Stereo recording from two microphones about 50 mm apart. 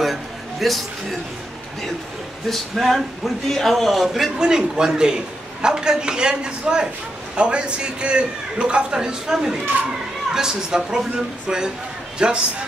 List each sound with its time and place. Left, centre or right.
0.0 s a sound: centre
2.5 s speech: centre
4.4 s a man's voice: centre